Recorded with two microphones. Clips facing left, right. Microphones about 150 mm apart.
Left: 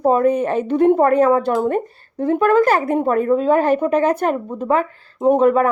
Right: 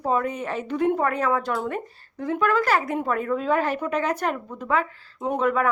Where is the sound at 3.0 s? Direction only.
40° left (ahead or behind).